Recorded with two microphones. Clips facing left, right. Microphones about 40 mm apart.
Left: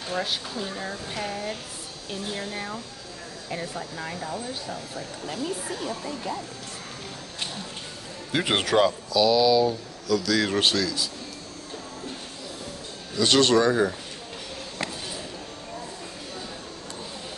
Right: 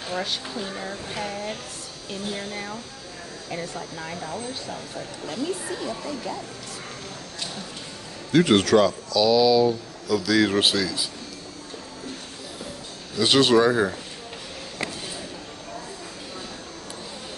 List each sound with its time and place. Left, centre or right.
0.1 s speech: centre
8.3 s speech: centre
9.2 s speech: centre
13.2 s speech: centre